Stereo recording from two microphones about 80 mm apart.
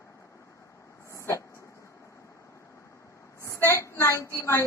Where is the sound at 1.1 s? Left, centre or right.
Left.